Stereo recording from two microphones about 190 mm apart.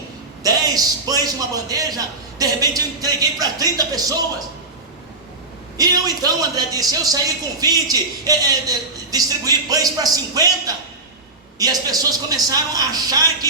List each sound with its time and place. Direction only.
0.4 s a man's voice: 20° right (ahead or behind)
5.7 s a man's voice: 20° right (ahead or behind)